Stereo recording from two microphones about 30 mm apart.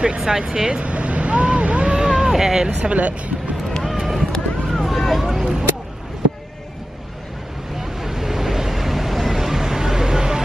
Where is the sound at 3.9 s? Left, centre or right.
Centre.